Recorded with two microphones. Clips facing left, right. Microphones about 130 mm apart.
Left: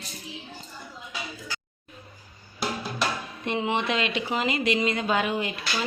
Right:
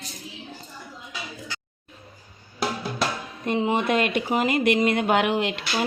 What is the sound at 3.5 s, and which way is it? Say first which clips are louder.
Speech: right 3 dB; 40° right (ahead or behind).